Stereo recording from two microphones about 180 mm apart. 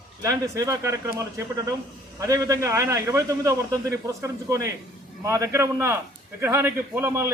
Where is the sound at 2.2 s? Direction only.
20° right (ahead or behind).